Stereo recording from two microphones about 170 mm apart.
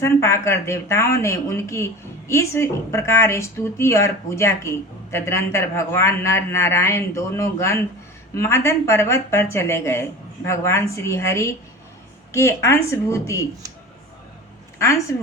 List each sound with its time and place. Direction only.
0.0 s speech: 15° left (ahead or behind)
14.8 s speech: 15° left (ahead or behind)